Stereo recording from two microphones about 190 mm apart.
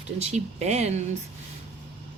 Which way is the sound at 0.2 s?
35° right (ahead or behind).